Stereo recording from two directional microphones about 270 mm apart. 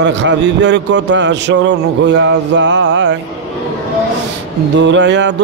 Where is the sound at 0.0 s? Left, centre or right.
Right.